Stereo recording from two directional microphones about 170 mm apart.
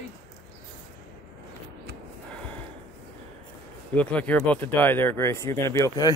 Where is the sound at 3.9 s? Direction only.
10° left (ahead or behind).